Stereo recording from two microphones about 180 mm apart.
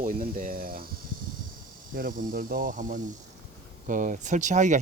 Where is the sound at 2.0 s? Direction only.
50° right (ahead or behind).